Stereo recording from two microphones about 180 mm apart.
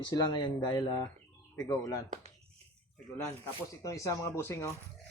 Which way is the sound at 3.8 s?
15° left (ahead or behind).